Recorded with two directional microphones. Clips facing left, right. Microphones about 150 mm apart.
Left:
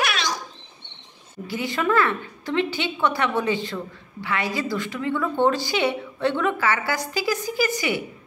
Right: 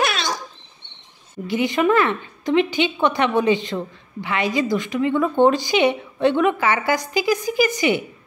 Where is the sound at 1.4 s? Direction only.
20° right (ahead or behind).